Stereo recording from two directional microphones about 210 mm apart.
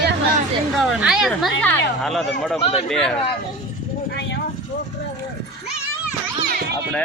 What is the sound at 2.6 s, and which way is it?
Speech, 30° left (ahead or behind).